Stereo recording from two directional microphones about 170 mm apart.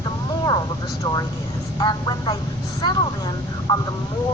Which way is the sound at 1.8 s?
25° left (ahead or behind).